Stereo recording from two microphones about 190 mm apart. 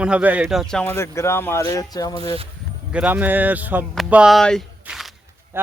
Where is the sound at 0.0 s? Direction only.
5° right (ahead or behind); by 2.3 s 20° left (ahead or behind).